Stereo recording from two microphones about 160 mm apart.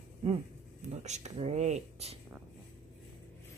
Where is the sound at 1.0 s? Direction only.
45° right (ahead or behind).